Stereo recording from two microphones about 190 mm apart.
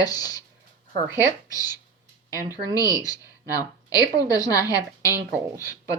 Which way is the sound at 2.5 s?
20° left (ahead or behind).